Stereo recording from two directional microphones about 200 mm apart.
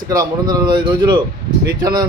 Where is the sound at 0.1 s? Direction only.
20° right (ahead or behind).